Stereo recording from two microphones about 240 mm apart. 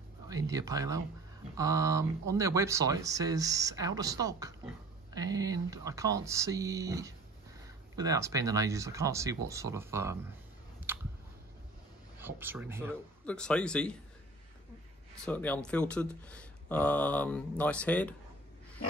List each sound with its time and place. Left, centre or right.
0.3 s speech: centre
10.9 s a sound: centre
12.2 s speech: centre
12.9 s speech: centre
15.2 s speech: centre